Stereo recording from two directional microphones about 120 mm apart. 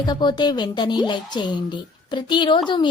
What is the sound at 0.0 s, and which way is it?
A woman's voice, 35° left (ahead or behind).